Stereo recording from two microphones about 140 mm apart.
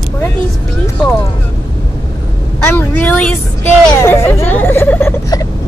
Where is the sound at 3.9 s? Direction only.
15° left (ahead or behind).